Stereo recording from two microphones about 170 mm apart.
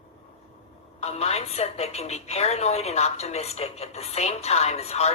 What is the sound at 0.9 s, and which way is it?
A woman's voice, 40° left (ahead or behind).